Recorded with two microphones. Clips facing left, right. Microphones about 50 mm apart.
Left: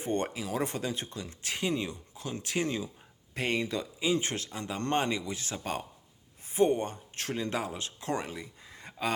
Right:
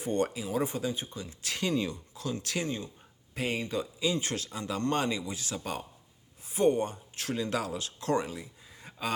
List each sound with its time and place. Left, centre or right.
0.0 s speech: left
0.4 s speech: left
1.5 s speech: centre
3.3 s speech: left
4.0 s speech: left
6.5 s speech: left
6.8 s speech: left
8.2 s speech: left
8.6 s a sound: left